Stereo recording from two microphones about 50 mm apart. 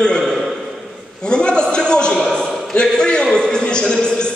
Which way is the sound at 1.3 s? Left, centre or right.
Centre.